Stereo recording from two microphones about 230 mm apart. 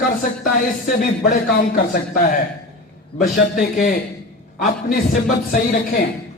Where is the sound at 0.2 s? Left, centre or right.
Left.